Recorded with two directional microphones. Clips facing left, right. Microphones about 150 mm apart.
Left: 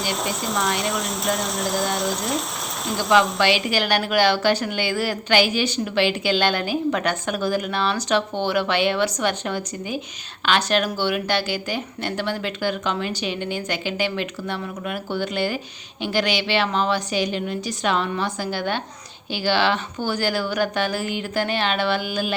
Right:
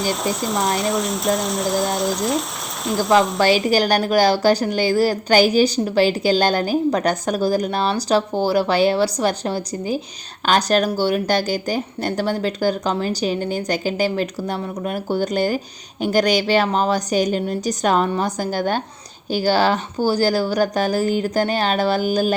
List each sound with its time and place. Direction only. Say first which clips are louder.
0.0 s speech: right 4 dB; centre (ahead or behind)
3.7 s speech: right 5 dB; 40° right (ahead or behind)